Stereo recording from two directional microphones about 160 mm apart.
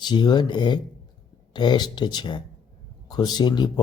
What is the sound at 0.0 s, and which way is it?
Speech, 25° left (ahead or behind).